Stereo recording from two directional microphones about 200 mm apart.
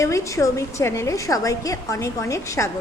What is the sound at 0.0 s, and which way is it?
A woman's voice, 15° left (ahead or behind).